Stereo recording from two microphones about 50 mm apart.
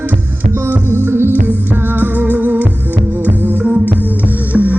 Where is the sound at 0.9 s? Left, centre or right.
Right.